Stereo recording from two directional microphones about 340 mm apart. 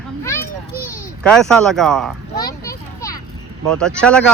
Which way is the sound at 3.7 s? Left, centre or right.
Centre.